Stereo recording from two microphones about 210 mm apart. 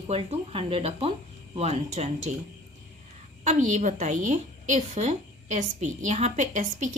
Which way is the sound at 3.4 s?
35° right (ahead or behind).